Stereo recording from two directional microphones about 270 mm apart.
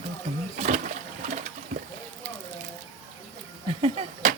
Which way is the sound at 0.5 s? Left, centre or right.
Right.